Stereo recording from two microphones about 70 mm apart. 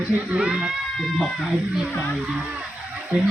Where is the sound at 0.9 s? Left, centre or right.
Centre.